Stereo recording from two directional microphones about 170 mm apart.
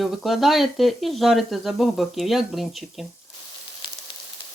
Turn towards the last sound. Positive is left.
turn(degrees=0)  # may be behind; listen again after turning